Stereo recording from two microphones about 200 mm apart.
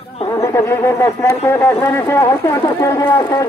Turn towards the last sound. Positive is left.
turn(degrees=15)  # may be behind; listen again after turning